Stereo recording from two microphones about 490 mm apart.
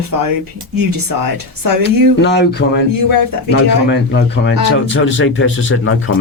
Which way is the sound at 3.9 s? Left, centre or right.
Left.